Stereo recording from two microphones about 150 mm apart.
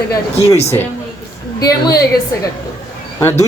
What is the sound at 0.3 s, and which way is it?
Speech, 45° left (ahead or behind).